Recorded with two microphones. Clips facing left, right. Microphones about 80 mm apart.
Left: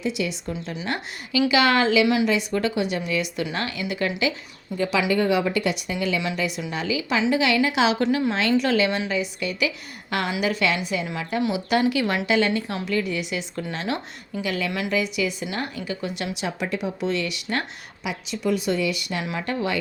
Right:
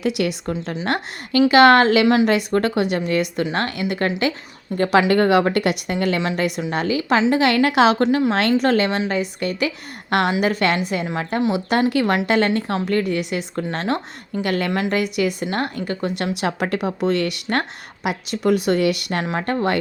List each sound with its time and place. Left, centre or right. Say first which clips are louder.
0.0 s a woman's voice: right 5 dB; right
0.6 s a woman's voice: right 5 dB; right
0.9 s a woman's voice: right 6 dB; right
14.7 s a woman's voice: right 6 dB; right
14.9 s a woman's voice: right 4 dB; right
19.2 s a woman's voice: right 5 dB; right